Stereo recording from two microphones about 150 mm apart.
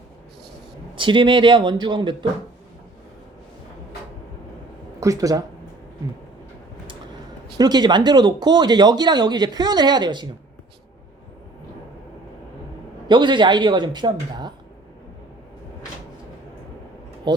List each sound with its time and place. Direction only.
0.9 s speech: 35° right (ahead or behind)
4.9 s speech: 20° right (ahead or behind)
7.6 s speech: 30° right (ahead or behind)
13.1 s speech: 30° right (ahead or behind)
17.3 s speech: 30° right (ahead or behind)